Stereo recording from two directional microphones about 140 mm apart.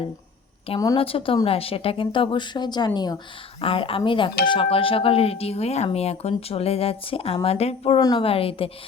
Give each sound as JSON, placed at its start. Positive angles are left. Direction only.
{"t": 0.9, "sound": "speech", "side_deg": 40}
{"t": 3.6, "sound": "speech", "side_deg": 40}
{"t": 7.9, "sound": "speech", "side_deg": 30}
{"t": 8.2, "sound": "speech", "side_deg": 40}